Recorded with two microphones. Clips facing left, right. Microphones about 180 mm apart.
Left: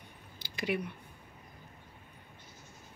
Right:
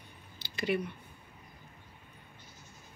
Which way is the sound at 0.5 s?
10° left (ahead or behind).